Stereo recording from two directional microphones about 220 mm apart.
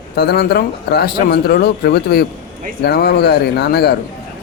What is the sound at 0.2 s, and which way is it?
Speech, 45° left (ahead or behind).